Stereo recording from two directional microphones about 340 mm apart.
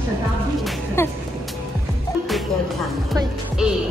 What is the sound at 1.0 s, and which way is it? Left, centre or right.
Speech, centre.